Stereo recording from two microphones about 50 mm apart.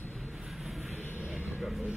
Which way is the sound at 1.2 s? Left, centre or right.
Right.